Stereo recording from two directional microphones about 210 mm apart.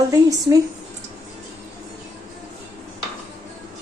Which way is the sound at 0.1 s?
15° right (ahead or behind).